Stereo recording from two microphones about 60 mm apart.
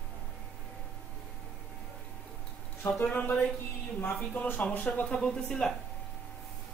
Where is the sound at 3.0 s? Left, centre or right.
Left.